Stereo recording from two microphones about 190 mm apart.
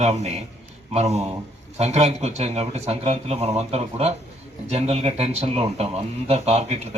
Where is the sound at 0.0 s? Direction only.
35° right (ahead or behind).